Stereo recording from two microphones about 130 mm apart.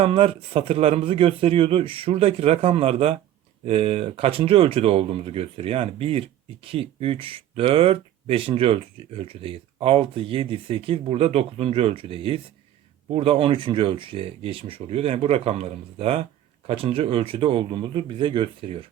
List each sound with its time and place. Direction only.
0.0 s speech: 45° right (ahead or behind)